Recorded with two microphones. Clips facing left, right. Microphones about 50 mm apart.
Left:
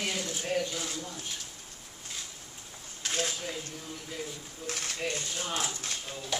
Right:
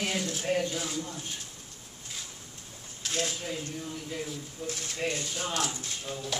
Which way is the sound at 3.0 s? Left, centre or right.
Centre.